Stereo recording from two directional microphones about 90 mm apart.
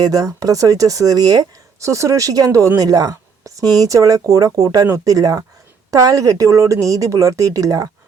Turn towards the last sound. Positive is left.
turn(degrees=-40)  # may be behind; listen again after turning